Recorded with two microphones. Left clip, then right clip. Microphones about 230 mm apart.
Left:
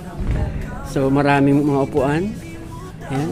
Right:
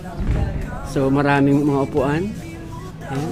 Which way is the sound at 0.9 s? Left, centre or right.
Centre.